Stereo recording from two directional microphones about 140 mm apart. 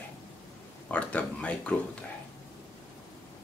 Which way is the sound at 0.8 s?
10° left (ahead or behind).